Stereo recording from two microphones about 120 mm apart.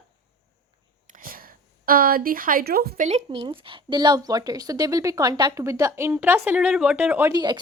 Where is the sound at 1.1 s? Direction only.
90° right.